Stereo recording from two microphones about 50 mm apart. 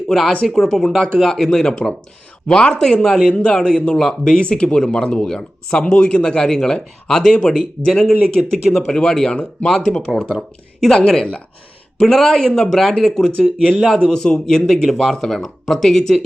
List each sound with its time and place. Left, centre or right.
0.1 s speech: centre
10.9 s speech: centre